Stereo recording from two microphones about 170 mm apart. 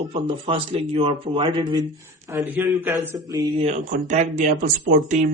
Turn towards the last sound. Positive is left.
turn(degrees=-45)  # may be behind; listen again after turning